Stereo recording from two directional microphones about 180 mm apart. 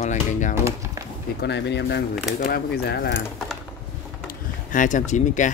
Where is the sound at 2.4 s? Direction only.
55° left (ahead or behind).